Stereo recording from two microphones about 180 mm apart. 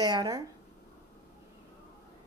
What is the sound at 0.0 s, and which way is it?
Speech, 20° right (ahead or behind).